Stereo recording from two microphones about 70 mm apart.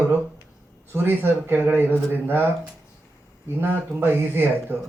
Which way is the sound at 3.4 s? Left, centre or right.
Right.